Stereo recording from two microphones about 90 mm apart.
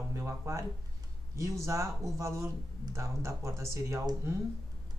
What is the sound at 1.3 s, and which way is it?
Speech, 35° right (ahead or behind).